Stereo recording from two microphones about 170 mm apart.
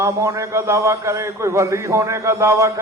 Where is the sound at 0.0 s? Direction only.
15° right (ahead or behind).